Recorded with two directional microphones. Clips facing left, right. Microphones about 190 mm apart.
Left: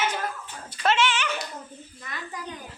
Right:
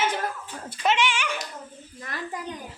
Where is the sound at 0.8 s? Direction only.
15° right (ahead or behind).